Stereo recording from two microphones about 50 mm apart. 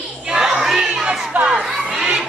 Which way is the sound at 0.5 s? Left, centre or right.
Centre.